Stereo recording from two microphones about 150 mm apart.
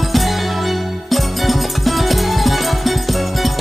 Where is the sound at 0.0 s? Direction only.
Centre (ahead or behind).